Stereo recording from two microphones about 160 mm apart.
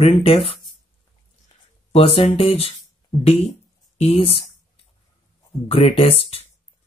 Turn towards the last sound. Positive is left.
turn(degrees=40)  # may be behind; listen again after turning